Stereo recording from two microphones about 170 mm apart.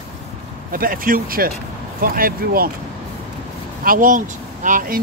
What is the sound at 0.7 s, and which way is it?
Speech, 55° right (ahead or behind).